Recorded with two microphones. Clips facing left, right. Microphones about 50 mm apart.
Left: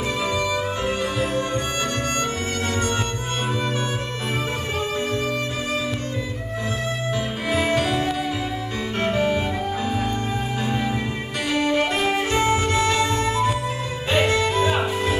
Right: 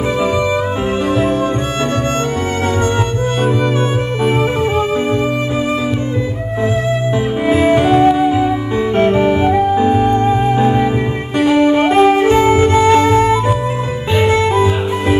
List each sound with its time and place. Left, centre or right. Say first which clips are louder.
4.2 s music: right 15 dB; right
7.4 s music: right 10 dB; right